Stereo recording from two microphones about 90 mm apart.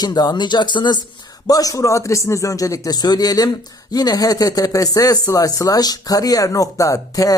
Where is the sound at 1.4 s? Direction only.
40° left (ahead or behind).